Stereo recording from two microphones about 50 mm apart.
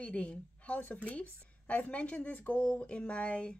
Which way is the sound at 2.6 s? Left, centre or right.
Left.